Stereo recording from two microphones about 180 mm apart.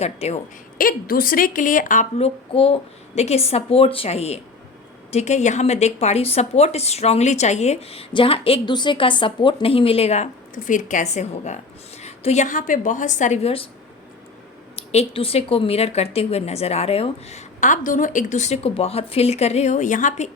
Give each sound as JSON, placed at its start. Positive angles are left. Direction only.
{"t": 0.0, "sound": "a woman's voice", "side_deg": 35}
{"t": 0.8, "sound": "a woman's voice", "side_deg": 55}
{"t": 14.8, "sound": "a woman's voice", "side_deg": 30}